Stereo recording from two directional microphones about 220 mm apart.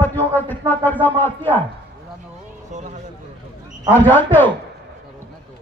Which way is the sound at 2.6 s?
35° right (ahead or behind).